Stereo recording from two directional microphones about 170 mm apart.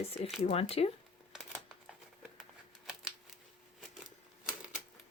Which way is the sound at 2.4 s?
5° right (ahead or behind).